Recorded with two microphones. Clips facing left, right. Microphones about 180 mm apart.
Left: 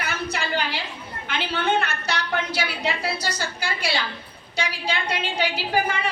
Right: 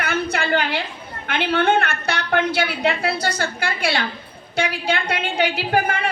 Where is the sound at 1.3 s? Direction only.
55° right (ahead or behind).